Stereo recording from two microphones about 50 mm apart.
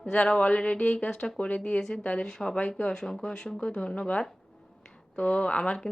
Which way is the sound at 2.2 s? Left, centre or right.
Centre.